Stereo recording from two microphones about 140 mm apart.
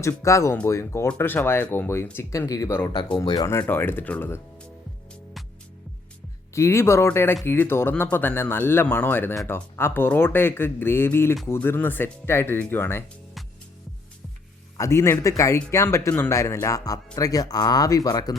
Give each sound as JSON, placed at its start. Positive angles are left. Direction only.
{"t": 0.2, "sound": "speech", "side_deg": 20}
{"t": 6.5, "sound": "speech", "side_deg": 20}
{"t": 14.8, "sound": "speech", "side_deg": 20}